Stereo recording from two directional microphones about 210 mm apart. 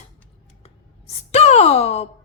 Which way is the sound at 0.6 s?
30° left (ahead or behind).